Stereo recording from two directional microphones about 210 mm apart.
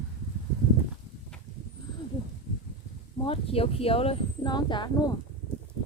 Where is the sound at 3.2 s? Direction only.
25° left (ahead or behind).